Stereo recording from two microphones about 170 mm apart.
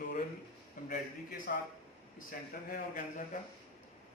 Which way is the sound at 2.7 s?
55° left (ahead or behind).